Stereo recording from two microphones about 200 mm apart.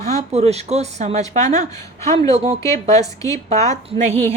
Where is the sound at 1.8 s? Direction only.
15° left (ahead or behind).